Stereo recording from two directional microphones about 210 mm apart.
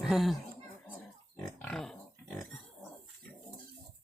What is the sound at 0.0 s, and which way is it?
Speech, centre (ahead or behind).